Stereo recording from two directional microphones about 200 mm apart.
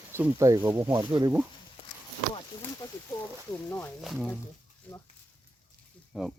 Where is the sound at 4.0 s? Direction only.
Centre (ahead or behind).